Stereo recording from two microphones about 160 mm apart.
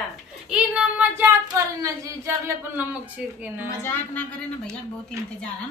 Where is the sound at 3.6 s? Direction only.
15° left (ahead or behind).